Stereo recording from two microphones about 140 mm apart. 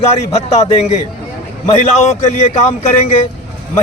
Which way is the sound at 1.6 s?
50° left (ahead or behind).